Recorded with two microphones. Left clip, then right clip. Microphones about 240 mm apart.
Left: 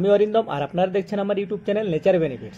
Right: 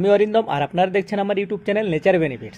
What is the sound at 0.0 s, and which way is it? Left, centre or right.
Speech, right.